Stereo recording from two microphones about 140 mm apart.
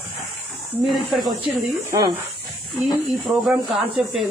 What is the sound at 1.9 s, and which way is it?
Speech, 25° right (ahead or behind).